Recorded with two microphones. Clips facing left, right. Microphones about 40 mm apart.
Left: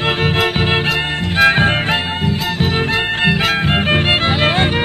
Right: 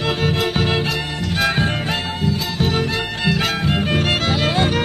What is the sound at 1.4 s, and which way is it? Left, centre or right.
Music, left.